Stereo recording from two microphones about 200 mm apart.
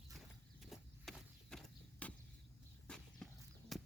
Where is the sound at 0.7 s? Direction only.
Centre (ahead or behind).